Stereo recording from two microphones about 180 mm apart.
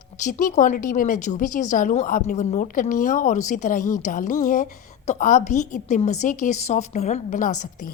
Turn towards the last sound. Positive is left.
turn(degrees=45)  # may be behind; listen again after turning